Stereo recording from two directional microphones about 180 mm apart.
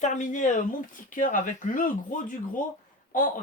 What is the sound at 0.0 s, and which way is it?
Speech, 45° left (ahead or behind).